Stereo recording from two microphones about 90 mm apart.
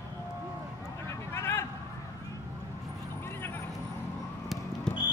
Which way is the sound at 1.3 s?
30° left (ahead or behind).